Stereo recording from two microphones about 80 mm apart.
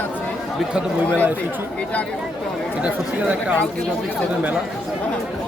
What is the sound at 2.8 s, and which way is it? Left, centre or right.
Speech, centre.